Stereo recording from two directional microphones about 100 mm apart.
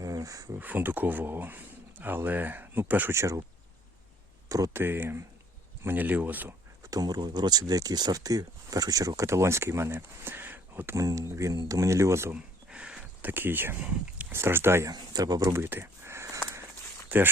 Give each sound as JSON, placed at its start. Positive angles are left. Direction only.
{"t": 0.0, "sound": "insect", "side_deg": -35}
{"t": 0.6, "sound": "speech", "side_deg": -20}
{"t": 4.4, "sound": "speech", "side_deg": -35}
{"t": 4.8, "sound": "speech", "side_deg": -20}
{"t": 6.8, "sound": "speech", "side_deg": -35}
{"t": 10.9, "sound": "speech", "side_deg": -35}
{"t": 12.3, "sound": "a sound", "side_deg": -10}
{"t": 13.3, "sound": "speech", "side_deg": -20}
{"t": 14.8, "sound": "speech", "side_deg": -40}
{"t": 15.5, "sound": "a sound", "side_deg": -25}
{"t": 17.1, "sound": "speech", "side_deg": -20}